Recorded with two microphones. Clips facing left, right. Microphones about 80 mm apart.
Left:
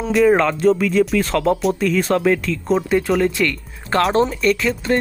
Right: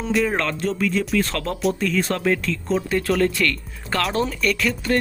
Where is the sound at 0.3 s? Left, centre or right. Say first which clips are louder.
Left 9 dB; centre.